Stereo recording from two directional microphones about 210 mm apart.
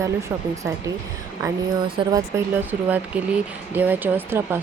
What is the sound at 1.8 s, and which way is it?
Speech, 25° right (ahead or behind).